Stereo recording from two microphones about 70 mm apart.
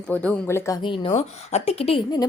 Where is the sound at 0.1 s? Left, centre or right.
Centre.